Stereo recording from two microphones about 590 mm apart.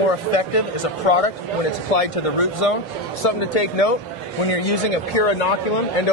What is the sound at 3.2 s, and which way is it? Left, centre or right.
A man's voice, left.